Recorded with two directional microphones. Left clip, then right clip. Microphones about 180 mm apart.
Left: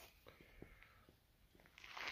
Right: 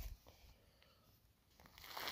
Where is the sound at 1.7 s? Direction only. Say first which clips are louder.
Right 1 dB; 65° right (ahead or behind).